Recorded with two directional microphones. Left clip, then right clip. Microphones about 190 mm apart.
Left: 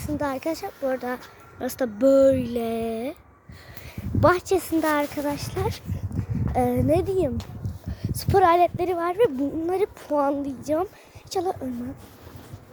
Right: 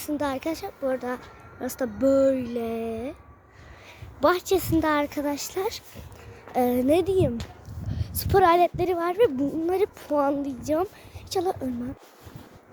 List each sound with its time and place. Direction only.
0.0 s speech: centre (ahead or behind); by 3.2 s 15° left (ahead or behind)
4.2 s speech: 5° left (ahead or behind)